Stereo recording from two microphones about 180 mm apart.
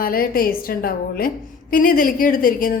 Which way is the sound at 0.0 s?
55° left (ahead or behind).